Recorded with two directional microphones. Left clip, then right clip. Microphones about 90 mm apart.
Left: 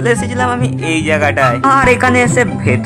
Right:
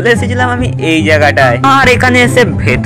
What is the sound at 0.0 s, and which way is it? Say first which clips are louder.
Speech: right 4 dB; 25° right (ahead or behind).